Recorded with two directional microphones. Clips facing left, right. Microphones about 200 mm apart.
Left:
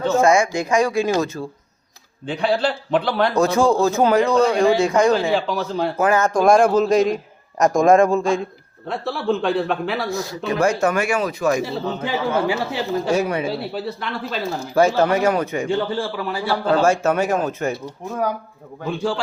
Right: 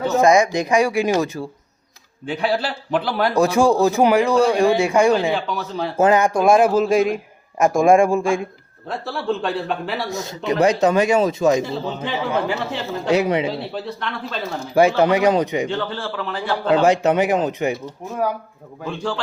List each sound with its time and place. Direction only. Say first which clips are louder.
0.1 s a man's voice: right 1 dB; 15° right (ahead or behind)
5.3 s a man's voice: left 3 dB; centre (ahead or behind)
6.0 s a man's voice: right 3 dB; 20° right (ahead or behind)
6.4 s a man's voice: left 2 dB; 5° right (ahead or behind)
8.9 s a man's voice: left 2 dB; centre (ahead or behind)
10.1 s speech: even; 20° right (ahead or behind)
11.6 s speech: left 1 dB; 5° left (ahead or behind)
13.1 s a man's voice: right 5 dB; 20° right (ahead or behind)
13.5 s a man's voice: left 1 dB; 5° left (ahead or behind)
14.8 s a man's voice: right 1 dB; 15° right (ahead or behind)
15.7 s speech: left 3 dB; 10° left (ahead or behind)
16.7 s a man's voice: right 2 dB; 15° right (ahead or behind)
18.9 s speech: left 3 dB; 10° left (ahead or behind)